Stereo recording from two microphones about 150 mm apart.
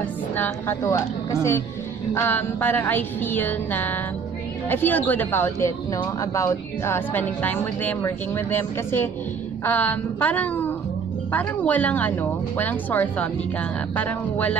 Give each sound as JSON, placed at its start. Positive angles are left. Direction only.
{"t": 0.4, "sound": "speech", "side_deg": 15}